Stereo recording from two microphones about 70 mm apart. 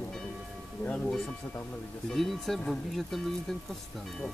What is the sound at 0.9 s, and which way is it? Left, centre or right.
Speech, centre.